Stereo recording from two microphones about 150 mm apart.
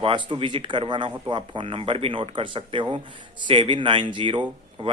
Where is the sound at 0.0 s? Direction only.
35° right (ahead or behind).